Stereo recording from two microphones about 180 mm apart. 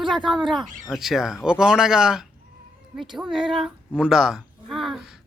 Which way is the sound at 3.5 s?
Centre (ahead or behind).